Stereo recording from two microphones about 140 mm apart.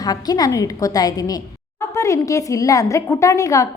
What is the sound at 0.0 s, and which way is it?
A woman's voice, 25° left (ahead or behind).